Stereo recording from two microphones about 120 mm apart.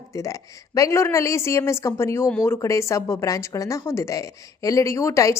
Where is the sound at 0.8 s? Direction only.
25° left (ahead or behind).